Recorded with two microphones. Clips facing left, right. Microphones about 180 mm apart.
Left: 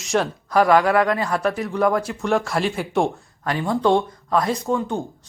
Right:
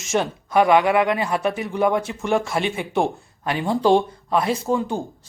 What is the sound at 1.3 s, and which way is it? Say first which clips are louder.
Speech: left 1 dB; centre (ahead or behind).